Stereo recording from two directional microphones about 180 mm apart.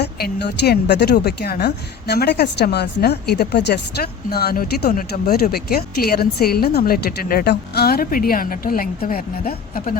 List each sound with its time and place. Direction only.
0.0 s a woman's voice: 65° left (ahead or behind); by 10.0 s 50° left (ahead or behind)